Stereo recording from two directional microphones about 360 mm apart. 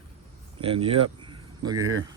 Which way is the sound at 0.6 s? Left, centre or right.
Centre.